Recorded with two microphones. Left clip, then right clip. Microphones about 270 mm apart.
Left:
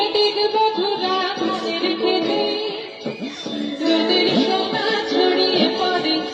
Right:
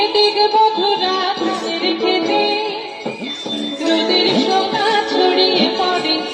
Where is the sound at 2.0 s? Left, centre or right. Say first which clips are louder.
Right 4 dB; right.